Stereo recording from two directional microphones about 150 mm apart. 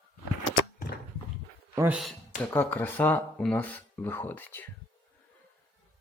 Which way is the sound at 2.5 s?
10° left (ahead or behind).